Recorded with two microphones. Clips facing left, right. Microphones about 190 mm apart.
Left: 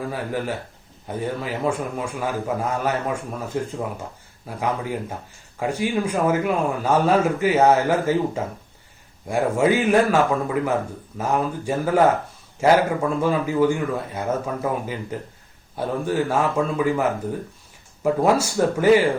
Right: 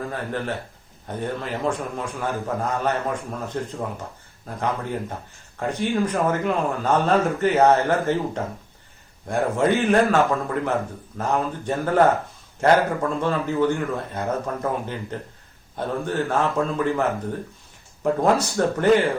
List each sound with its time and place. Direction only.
0.1 s a man's voice: 10° left (ahead or behind)